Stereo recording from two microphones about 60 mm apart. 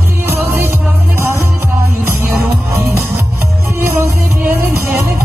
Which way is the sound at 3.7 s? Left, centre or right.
Right.